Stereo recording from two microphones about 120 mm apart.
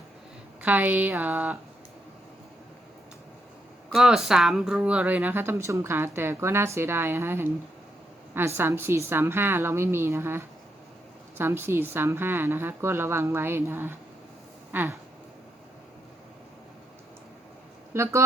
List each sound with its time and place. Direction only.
0.6 s speech: 15° right (ahead or behind)
3.9 s speech: 5° right (ahead or behind)
14.7 s a sound: 15° right (ahead or behind)
17.9 s speech: 20° right (ahead or behind)